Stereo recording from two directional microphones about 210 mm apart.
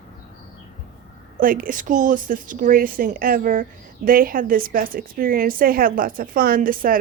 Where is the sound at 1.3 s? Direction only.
40° right (ahead or behind).